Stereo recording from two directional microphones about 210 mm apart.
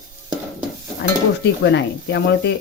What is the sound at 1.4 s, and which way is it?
Speech, 55° left (ahead or behind).